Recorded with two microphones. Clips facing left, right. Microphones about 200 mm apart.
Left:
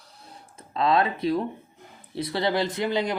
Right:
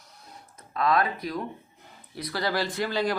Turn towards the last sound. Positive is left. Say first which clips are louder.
# left 1 dB
turn(degrees=20)  # may be behind; listen again after turning